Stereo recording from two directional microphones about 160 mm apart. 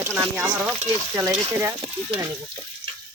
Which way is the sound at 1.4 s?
20° right (ahead or behind).